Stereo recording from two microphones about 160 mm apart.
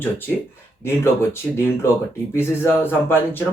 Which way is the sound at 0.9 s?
15° left (ahead or behind).